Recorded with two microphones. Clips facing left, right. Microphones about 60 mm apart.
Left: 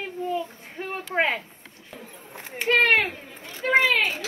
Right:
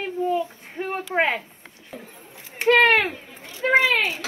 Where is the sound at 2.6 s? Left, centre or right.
Right.